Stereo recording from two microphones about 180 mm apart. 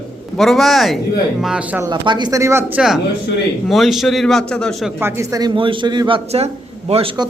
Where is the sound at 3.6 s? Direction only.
Centre (ahead or behind).